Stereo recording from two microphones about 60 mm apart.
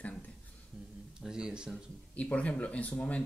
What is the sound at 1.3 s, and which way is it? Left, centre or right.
Speech, centre.